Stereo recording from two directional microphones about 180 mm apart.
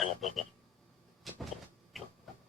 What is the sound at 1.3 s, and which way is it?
Vehicle, centre (ahead or behind).